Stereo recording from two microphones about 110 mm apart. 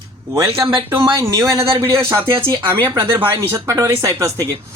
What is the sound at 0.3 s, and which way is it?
Speech, 30° right (ahead or behind).